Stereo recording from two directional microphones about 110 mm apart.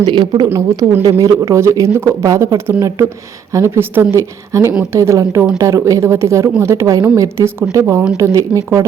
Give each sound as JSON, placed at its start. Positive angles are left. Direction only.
{"t": 0.0, "sound": "speech", "side_deg": -40}
{"t": 0.4, "sound": "speech", "side_deg": -25}